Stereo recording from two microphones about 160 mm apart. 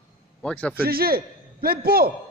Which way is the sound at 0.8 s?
70° right (ahead or behind).